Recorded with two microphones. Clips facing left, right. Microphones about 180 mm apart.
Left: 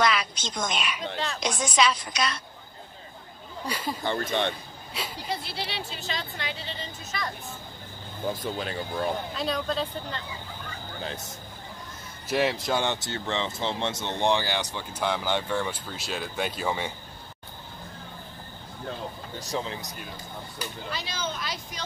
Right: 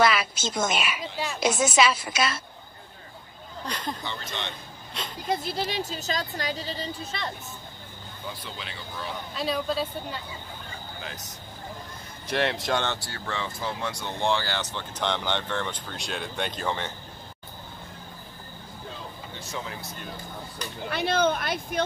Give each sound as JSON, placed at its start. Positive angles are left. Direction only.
{"t": 0.0, "sound": "a woman's voice", "side_deg": -5}
{"t": 3.6, "sound": "speech", "side_deg": 5}
{"t": 4.0, "sound": "speech", "side_deg": 50}
{"t": 4.9, "sound": "speech", "side_deg": 5}
{"t": 5.3, "sound": "speech", "side_deg": -45}
{"t": 8.2, "sound": "speech", "side_deg": 45}
{"t": 9.3, "sound": "speech", "side_deg": 0}
{"t": 11.0, "sound": "speech", "side_deg": 30}
{"t": 12.3, "sound": "speech", "side_deg": 5}
{"t": 12.8, "sound": "speech", "side_deg": 20}
{"t": 19.4, "sound": "speech", "side_deg": 35}
{"t": 19.7, "sound": "speech", "side_deg": 15}
{"t": 20.9, "sound": "speech", "side_deg": -55}